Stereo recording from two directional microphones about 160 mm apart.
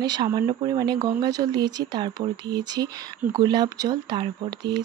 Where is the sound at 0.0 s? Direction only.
25° right (ahead or behind).